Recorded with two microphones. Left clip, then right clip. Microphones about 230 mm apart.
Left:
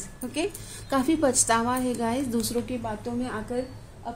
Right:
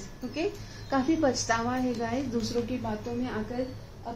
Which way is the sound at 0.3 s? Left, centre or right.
Left.